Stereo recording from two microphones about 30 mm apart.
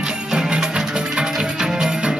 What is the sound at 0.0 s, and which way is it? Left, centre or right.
Music, centre.